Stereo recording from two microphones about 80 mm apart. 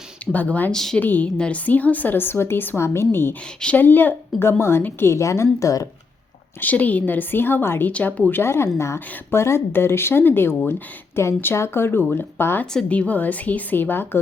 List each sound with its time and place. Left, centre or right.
0.3 s a woman's voice: left
0.7 s a woman's voice: centre
0.9 s a woman's voice: centre
3.6 s a woman's voice: centre; by 5.9 s left
6.6 s a woman's voice: centre
12.9 s a woman's voice: centre